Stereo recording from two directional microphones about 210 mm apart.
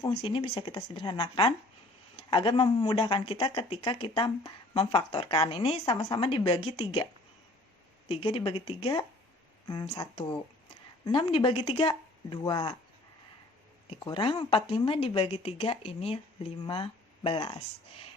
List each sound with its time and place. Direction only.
0.1 s speech: 25° left (ahead or behind)
8.0 s speech: 25° left (ahead or behind)
13.9 s speech: 25° left (ahead or behind)